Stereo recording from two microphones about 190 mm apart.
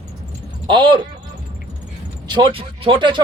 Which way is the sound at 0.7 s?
25° right (ahead or behind).